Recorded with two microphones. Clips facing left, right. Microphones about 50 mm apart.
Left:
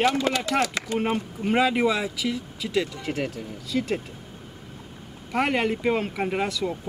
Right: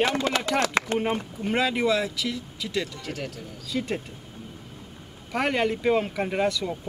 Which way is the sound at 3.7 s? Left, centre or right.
Centre.